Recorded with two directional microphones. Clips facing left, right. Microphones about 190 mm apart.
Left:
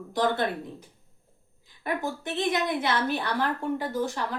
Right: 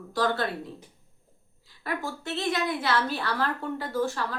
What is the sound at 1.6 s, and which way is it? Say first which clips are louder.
A woman's voice: left 3 dB; 20° left (ahead or behind).